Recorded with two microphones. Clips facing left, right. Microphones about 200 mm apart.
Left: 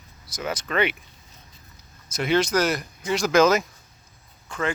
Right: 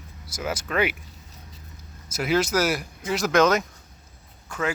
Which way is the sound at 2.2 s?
5° right (ahead or behind).